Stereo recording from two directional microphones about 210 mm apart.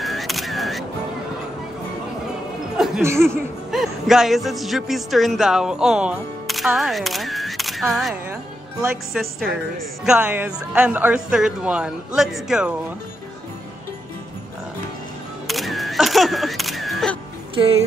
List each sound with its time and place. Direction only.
0.0 s single-lens reflex camera: centre (ahead or behind)
3.0 s speech: 10° right (ahead or behind)
3.7 s speech: centre (ahead or behind)
15.4 s single-lens reflex camera: centre (ahead or behind)